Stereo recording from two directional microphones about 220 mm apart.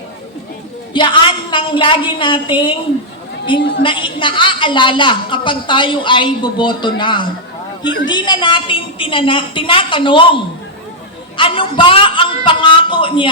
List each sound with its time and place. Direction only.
0.9 s a woman's voice: 20° left (ahead or behind)
3.8 s a woman's voice: 20° left (ahead or behind)